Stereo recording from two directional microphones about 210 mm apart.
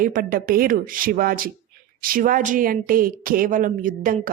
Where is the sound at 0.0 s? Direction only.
40° right (ahead or behind).